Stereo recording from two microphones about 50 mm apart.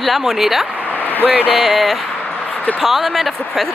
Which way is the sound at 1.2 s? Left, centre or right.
Right.